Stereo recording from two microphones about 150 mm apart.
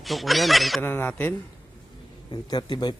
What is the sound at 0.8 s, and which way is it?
Speech, 15° left (ahead or behind).